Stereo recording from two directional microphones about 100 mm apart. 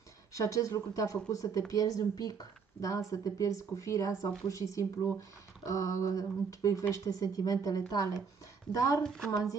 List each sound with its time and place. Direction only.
0.3 s speech: 35° left (ahead or behind)